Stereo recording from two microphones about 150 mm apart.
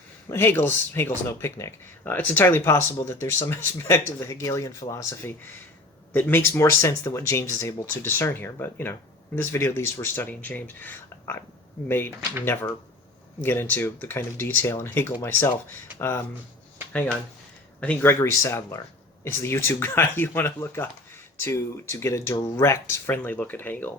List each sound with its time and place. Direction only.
0.3 s speech: 15° left (ahead or behind)
13.4 s speech: 15° left (ahead or behind)
17.7 s speech: 10° left (ahead or behind)